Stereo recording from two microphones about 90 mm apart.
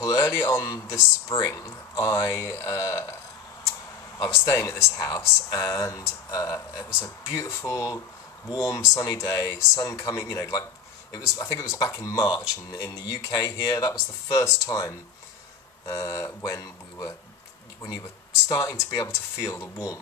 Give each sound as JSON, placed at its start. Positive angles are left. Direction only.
{"t": 0.0, "sound": "a man's voice", "side_deg": 35}
{"t": 4.2, "sound": "speech", "side_deg": 35}
{"t": 9.3, "sound": "speech", "side_deg": 30}
{"t": 11.1, "sound": "speech", "side_deg": 45}
{"t": 11.5, "sound": "speech", "side_deg": 35}
{"t": 13.3, "sound": "speech", "side_deg": 45}
{"t": 18.5, "sound": "speech", "side_deg": 40}